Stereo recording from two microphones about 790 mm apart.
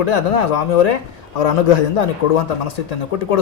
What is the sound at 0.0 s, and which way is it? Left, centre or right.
A man's voice, left.